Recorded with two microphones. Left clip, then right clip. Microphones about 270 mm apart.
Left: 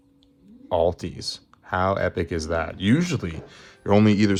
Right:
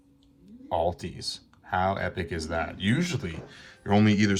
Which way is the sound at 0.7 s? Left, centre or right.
Left.